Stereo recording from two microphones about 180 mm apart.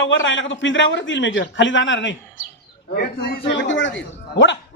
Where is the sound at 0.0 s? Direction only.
90° left.